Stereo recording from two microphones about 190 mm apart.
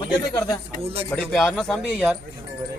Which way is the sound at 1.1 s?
5° left (ahead or behind).